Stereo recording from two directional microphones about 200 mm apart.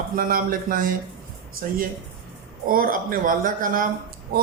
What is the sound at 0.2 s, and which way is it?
A man's voice, 45° right (ahead or behind).